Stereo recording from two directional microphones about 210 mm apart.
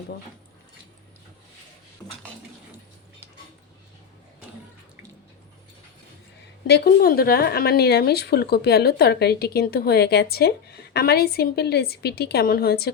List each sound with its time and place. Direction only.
6.7 s speech: 50° left (ahead or behind)